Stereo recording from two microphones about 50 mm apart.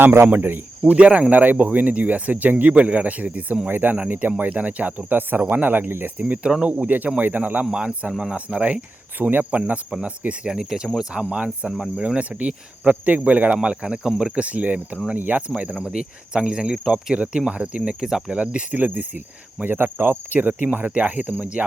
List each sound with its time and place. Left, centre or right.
0.0 s speech: right
0.3 s speech: right
0.9 s speech: right
9.1 s speech: right
10.5 s cricket: centre
11.1 s speech: right
11.8 s cricket: centre
12.1 s speech: right
14.2 s cricket: centre
14.4 s speech: right
18.0 s cricket: centre
18.3 s speech: right
19.7 s cricket: right
20.7 s speech: right